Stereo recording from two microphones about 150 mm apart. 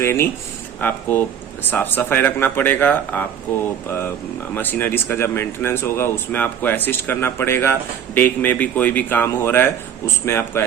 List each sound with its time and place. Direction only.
0.0 s speech: 15° left (ahead or behind)